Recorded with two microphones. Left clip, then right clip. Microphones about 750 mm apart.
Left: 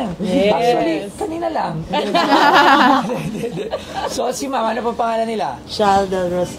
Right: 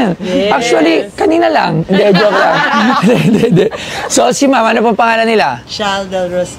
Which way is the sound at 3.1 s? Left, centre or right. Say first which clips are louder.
Right 14 dB; right.